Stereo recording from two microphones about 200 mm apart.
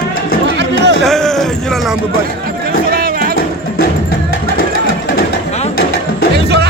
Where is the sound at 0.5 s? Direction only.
60° right (ahead or behind).